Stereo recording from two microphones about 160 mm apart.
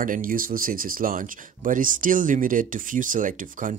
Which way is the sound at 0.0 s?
60° right (ahead or behind).